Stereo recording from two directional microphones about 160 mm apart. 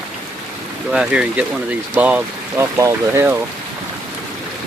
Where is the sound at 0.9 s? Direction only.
5° right (ahead or behind).